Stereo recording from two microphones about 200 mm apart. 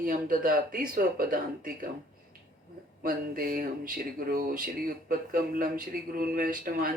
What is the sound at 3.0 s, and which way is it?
Speech, 45° right (ahead or behind).